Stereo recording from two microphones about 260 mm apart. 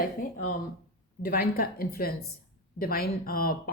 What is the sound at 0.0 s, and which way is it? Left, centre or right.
A woman's voice, left.